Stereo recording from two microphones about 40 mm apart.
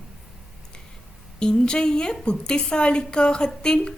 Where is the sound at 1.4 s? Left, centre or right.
Left.